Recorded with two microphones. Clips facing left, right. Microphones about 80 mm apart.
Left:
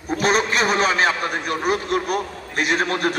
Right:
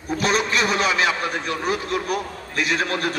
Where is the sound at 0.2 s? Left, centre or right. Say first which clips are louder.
Left 2 dB; left.